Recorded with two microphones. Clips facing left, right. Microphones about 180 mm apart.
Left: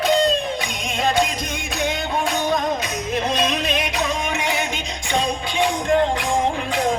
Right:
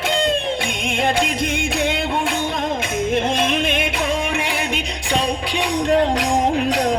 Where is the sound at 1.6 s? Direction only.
55° right (ahead or behind).